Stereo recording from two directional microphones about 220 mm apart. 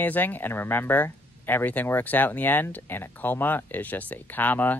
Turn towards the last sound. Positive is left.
turn(degrees=10)  # may be behind; listen again after turning